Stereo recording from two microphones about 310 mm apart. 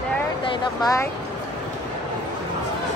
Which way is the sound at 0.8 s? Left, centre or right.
Centre.